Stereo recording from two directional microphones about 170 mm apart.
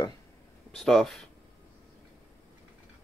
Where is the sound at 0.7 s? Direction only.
Centre (ahead or behind).